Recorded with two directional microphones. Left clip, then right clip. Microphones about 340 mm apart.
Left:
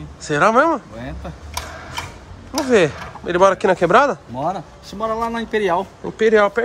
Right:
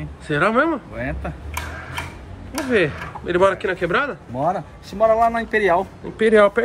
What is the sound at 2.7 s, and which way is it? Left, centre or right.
Speech, centre.